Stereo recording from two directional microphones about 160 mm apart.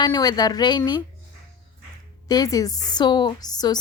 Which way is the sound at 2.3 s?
25° left (ahead or behind).